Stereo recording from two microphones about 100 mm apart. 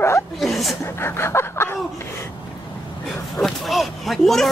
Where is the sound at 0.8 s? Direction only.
25° left (ahead or behind).